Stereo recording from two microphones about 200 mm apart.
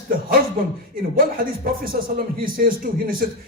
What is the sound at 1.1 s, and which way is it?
A man's voice, 45° right (ahead or behind).